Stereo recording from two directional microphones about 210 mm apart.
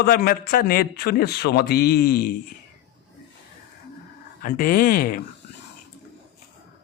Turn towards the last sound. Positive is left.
turn(degrees=40)  # may be behind; listen again after turning